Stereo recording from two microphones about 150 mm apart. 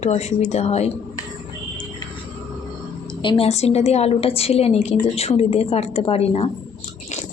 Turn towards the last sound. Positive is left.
turn(degrees=40)  # may be behind; listen again after turning